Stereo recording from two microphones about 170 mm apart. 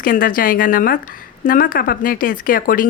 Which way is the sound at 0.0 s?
55° left (ahead or behind).